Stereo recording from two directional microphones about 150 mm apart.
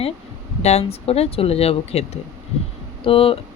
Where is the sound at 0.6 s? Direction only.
45° left (ahead or behind).